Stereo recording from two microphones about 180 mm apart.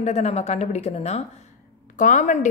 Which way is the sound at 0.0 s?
35° left (ahead or behind).